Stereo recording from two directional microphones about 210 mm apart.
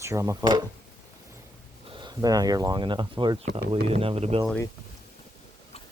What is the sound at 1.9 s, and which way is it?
Speech, 20° right (ahead or behind).